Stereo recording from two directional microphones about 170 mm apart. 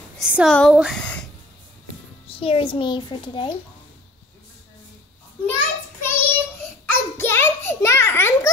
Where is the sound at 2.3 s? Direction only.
30° left (ahead or behind).